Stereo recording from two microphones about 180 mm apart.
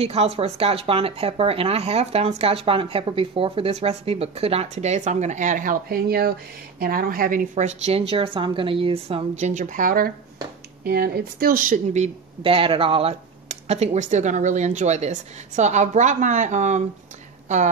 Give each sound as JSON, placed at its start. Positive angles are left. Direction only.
{"t": 0.0, "sound": "a woman's voice", "side_deg": -35}